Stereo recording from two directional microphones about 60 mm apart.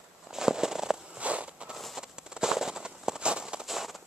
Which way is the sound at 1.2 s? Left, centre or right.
Right.